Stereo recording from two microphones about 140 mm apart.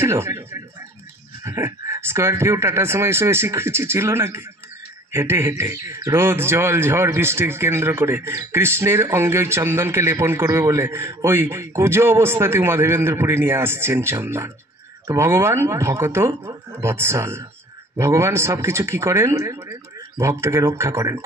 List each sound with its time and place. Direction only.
0.0 s a man's voice: 20° right (ahead or behind)